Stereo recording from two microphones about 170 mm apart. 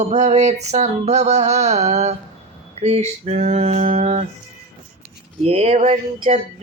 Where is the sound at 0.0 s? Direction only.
40° right (ahead or behind).